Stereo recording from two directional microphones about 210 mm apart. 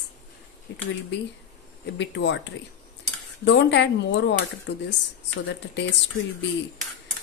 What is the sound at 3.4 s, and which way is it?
Speech, 55° left (ahead or behind).